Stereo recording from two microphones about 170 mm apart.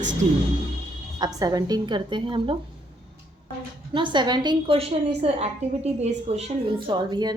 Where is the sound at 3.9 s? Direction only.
30° right (ahead or behind).